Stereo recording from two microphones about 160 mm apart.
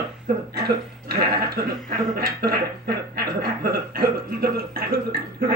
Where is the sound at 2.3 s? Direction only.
70° right (ahead or behind).